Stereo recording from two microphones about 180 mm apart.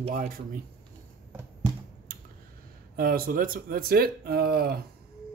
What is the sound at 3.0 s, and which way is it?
Speech, 55° right (ahead or behind).